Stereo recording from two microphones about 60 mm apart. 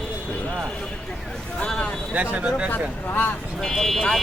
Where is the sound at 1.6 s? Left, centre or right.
Centre.